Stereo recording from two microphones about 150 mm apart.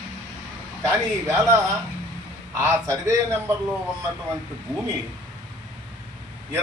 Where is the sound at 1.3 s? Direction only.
20° right (ahead or behind).